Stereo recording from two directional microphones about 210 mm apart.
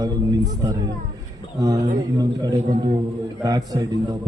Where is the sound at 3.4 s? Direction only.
20° right (ahead or behind).